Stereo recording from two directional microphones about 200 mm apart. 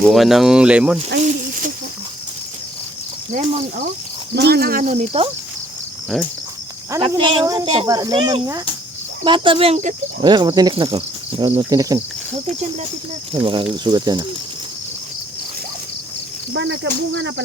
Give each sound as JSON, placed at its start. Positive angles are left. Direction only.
{"t": 0.0, "sound": "speech", "side_deg": 0}
{"t": 1.2, "sound": "snake", "side_deg": -40}
{"t": 4.4, "sound": "speech", "side_deg": -55}
{"t": 4.9, "sound": "speech", "side_deg": -30}
{"t": 6.1, "sound": "speech", "side_deg": 0}
{"t": 6.9, "sound": "speech", "side_deg": -20}
{"t": 10.2, "sound": "speech", "side_deg": -20}
{"t": 13.3, "sound": "speech", "side_deg": -25}
{"t": 16.5, "sound": "speech", "side_deg": -65}